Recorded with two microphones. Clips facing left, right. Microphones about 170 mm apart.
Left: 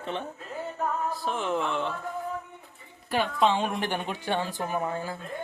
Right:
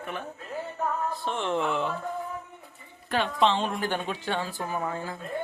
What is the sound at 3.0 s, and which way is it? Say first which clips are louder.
Speech: even; 10° left (ahead or behind).